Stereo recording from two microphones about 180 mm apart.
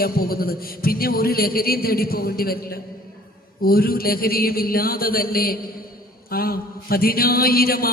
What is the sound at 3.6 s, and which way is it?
Music, 55° left (ahead or behind).